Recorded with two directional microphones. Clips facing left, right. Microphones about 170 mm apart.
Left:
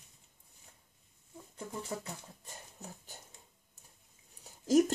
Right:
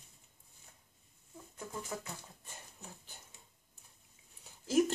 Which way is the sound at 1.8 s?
35° left (ahead or behind).